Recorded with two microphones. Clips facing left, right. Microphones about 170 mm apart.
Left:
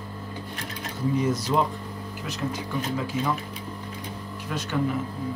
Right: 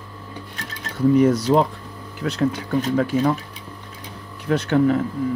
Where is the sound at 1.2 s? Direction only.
65° right (ahead or behind).